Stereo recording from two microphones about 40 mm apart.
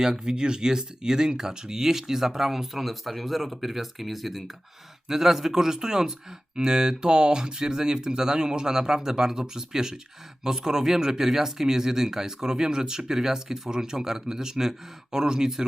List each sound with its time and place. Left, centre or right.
0.0 s speech: centre